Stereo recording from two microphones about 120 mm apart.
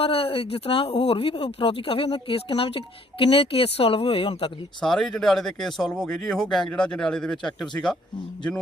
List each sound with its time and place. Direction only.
0.0 s speech: 50° left (ahead or behind)
4.8 s speech: 5° left (ahead or behind)